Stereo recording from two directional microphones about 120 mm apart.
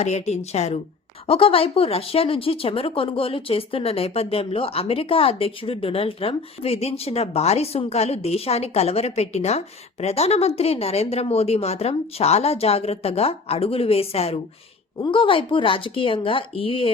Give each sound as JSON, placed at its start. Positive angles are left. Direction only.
{"t": 0.0, "sound": "speech", "side_deg": 65}
{"t": 1.3, "sound": "a woman's voice", "side_deg": 55}